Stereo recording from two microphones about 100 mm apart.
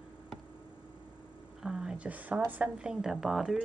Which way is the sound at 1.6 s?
5° right (ahead or behind).